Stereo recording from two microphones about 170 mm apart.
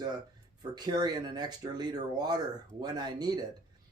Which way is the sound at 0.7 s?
25° right (ahead or behind).